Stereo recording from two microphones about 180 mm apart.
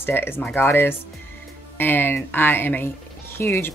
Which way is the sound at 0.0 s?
10° left (ahead or behind).